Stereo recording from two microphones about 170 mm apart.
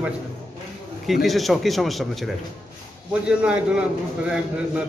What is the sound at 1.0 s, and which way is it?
A man's voice, centre (ahead or behind).